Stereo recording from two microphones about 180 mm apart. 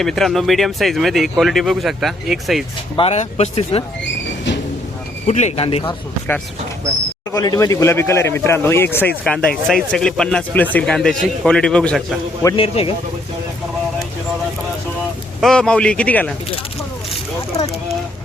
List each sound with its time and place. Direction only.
0.0 s speech: centre (ahead or behind)
2.9 s speech: 35° left (ahead or behind)
5.2 s speech: 40° left (ahead or behind)
7.3 s speech: 20° left (ahead or behind); by 12.2 s centre (ahead or behind)
12.5 s speech: 30° left (ahead or behind)
15.4 s speech: 5° left (ahead or behind)